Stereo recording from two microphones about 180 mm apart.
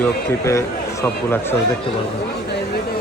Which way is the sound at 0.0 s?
15° left (ahead or behind).